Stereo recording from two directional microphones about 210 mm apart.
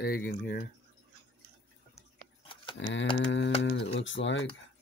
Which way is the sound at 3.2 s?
60° left (ahead or behind).